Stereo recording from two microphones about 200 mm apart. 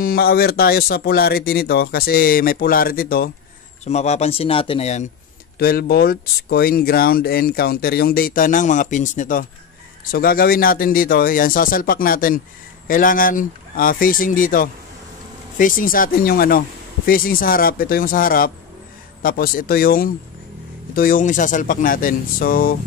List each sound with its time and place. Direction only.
0.0 s speech: 50° left (ahead or behind)
3.8 s speech: 35° left (ahead or behind)
5.6 s speech: 50° left (ahead or behind)